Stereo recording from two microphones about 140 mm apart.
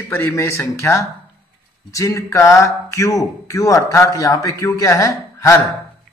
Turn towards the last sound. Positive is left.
turn(degrees=25)  # may be behind; listen again after turning